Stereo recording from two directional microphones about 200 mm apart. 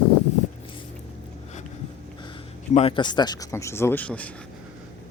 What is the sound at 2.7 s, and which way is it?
Speech, 30° left (ahead or behind).